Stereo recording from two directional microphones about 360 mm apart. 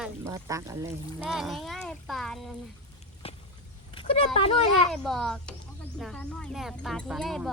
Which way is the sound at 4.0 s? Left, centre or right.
Centre.